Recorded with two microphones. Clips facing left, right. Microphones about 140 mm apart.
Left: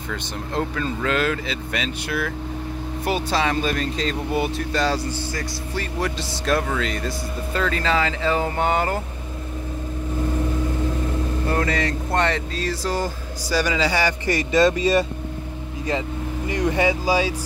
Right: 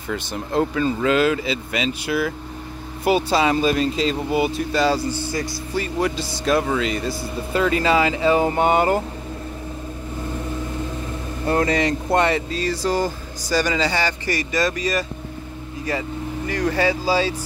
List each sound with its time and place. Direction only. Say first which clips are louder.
0.1 s speech: right 5 dB; 5° right (ahead or behind)
11.5 s speech: right 5 dB; 20° right (ahead or behind); by 15.0 s 25° left (ahead or behind)
16.4 s speech: even; 20° left (ahead or behind)